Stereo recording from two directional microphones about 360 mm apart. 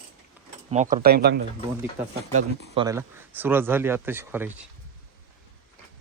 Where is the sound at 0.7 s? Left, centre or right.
Right.